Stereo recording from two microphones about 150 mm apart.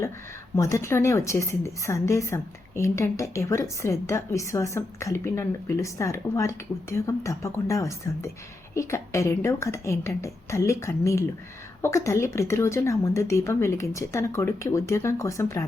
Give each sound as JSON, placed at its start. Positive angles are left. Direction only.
{"t": 0.5, "sound": "a woman's voice", "side_deg": 20}